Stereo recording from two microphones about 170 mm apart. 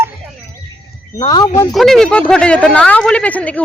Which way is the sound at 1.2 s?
25° left (ahead or behind).